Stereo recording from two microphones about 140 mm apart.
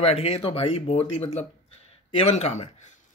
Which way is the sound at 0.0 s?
45° left (ahead or behind).